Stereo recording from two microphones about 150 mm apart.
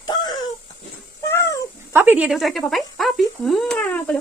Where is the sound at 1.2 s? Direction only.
20° left (ahead or behind).